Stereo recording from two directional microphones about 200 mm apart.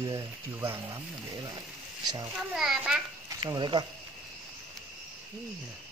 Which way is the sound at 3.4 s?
20° right (ahead or behind).